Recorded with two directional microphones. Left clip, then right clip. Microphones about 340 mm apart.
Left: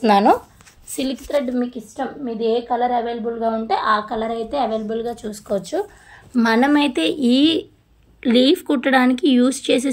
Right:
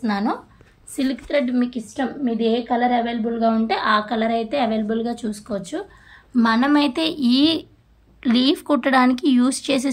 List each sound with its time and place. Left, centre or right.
0.9 s a woman's voice: centre
6.3 s speech: centre